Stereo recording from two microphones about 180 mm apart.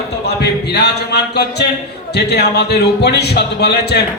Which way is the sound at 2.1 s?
65° left (ahead or behind).